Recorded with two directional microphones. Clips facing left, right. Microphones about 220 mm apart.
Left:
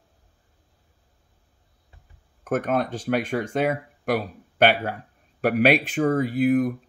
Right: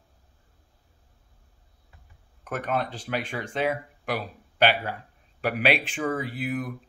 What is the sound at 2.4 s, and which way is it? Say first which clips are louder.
Speech: left 5 dB; 45° left (ahead or behind).